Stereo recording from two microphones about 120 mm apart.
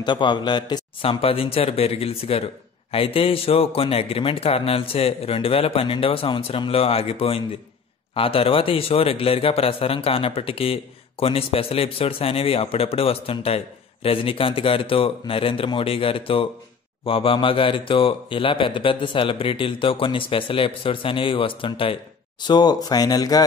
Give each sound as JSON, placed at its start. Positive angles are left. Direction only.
{"t": 0.0, "sound": "speech", "side_deg": 40}
{"t": 1.0, "sound": "a man's voice", "side_deg": 50}
{"t": 22.5, "sound": "speech", "side_deg": 35}